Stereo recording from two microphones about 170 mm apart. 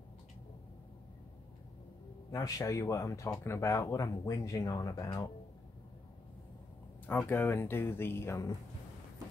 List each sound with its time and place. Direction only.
2.3 s speech: 20° left (ahead or behind)
7.1 s speech: 10° left (ahead or behind)